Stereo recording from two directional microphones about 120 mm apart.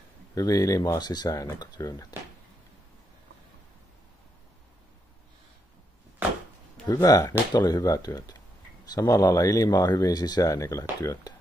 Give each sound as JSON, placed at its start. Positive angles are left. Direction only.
{"t": 0.3, "sound": "speech", "side_deg": 30}
{"t": 6.9, "sound": "speech", "side_deg": 30}